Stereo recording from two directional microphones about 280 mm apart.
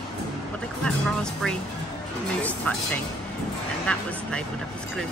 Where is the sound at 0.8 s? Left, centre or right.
Centre.